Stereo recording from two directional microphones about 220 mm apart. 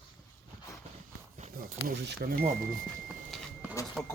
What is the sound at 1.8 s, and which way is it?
Speech, 40° right (ahead or behind).